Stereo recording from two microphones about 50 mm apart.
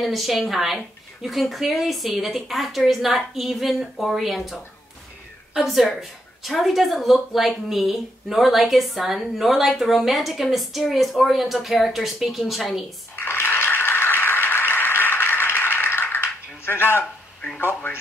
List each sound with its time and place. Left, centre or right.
0.0 s speech: centre
5.6 s speech: centre
13.1 s a sound: left